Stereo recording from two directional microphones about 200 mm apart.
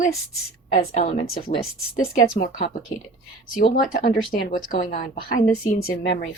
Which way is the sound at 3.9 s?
45° left (ahead or behind).